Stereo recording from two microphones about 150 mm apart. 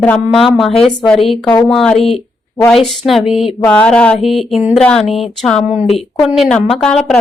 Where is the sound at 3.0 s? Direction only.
Centre (ahead or behind).